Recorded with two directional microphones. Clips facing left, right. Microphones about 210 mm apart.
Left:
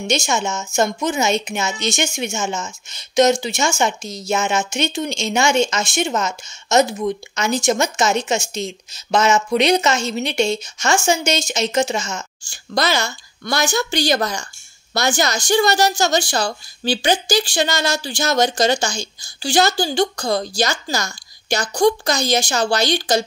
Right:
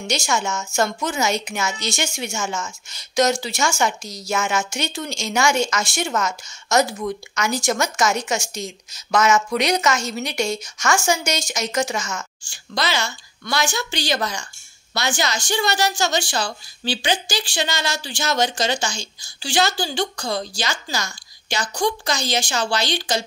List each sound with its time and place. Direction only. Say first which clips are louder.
0.0 s a woman's voice: left 3 dB; 20° left (ahead or behind)
12.4 s a woman's voice: left 5 dB; 45° left (ahead or behind)